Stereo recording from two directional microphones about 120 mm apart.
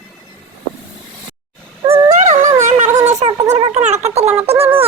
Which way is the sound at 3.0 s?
70° right (ahead or behind).